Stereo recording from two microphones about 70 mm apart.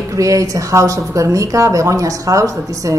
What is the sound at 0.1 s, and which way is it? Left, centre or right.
A woman's voice, right.